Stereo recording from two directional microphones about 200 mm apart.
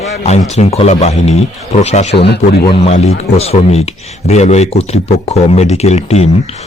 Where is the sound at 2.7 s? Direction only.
30° left (ahead or behind).